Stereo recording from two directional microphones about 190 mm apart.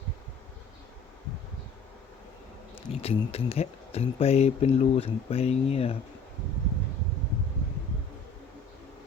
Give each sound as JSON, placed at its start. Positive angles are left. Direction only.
{"t": 2.9, "sound": "speech", "side_deg": 30}